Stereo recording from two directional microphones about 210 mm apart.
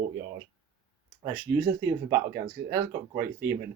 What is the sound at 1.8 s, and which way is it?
Speech, 15° right (ahead or behind).